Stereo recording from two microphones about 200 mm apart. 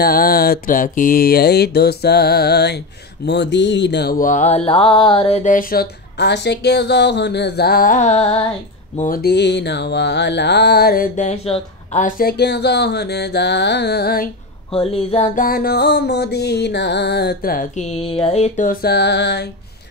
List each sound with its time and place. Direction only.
0.0 s mantra: 50° left (ahead or behind); by 8.5 s 30° left (ahead or behind)
8.9 s mantra: 40° left (ahead or behind)
14.7 s mantra: 30° left (ahead or behind); by 19.5 s 55° left (ahead or behind)